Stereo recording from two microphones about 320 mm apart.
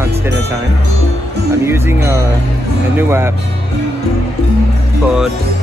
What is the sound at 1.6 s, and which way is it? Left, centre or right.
Speech, centre.